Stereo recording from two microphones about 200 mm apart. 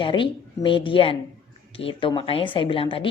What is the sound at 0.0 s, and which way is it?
A woman's voice, 25° left (ahead or behind).